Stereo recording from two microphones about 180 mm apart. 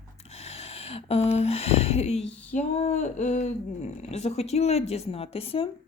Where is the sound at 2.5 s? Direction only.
40° left (ahead or behind).